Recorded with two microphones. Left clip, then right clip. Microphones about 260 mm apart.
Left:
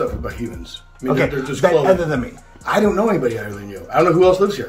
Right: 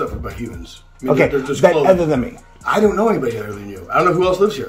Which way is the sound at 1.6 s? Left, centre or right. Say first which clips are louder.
Right 2 dB; right.